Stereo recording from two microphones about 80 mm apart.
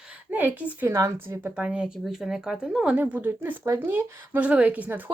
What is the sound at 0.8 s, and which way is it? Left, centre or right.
Speech, right.